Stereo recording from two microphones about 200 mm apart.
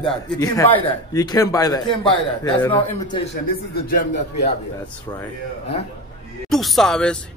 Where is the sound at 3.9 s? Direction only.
55° left (ahead or behind).